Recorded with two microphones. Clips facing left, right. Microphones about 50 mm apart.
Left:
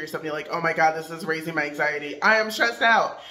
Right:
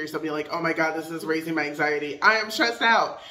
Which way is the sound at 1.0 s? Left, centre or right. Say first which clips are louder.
Right 1 dB; left.